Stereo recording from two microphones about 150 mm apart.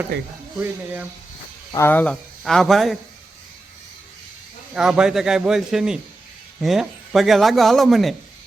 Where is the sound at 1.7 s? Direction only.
15° left (ahead or behind).